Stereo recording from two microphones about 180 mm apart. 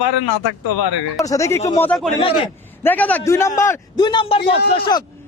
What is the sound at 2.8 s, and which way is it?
A man's voice, 10° left (ahead or behind).